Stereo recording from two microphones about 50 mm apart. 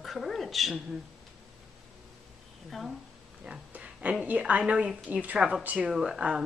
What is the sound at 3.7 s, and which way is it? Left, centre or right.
A woman's voice, right.